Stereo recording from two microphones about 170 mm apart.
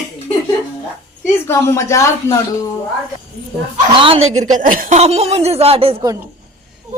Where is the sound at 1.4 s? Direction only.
15° left (ahead or behind).